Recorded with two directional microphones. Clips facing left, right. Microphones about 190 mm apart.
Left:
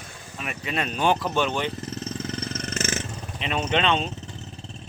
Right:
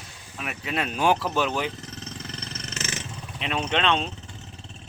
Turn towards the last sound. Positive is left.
turn(degrees=5)  # may be behind; listen again after turning